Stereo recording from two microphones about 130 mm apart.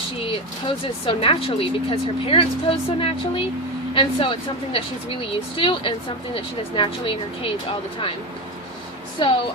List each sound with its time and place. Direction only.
0.2 s speech: 45° left (ahead or behind)
9.1 s speech: 40° left (ahead or behind)